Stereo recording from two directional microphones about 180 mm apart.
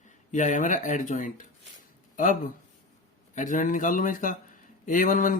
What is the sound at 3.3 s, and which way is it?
Speech, 45° left (ahead or behind).